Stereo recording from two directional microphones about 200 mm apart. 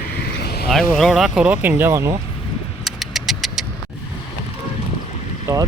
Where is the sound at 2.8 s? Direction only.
Centre (ahead or behind).